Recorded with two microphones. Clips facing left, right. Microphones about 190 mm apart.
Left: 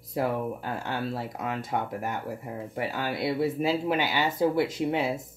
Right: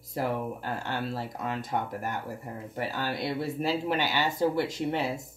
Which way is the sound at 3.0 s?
5° left (ahead or behind).